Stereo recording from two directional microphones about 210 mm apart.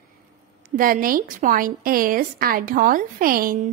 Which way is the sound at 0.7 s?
40° right (ahead or behind).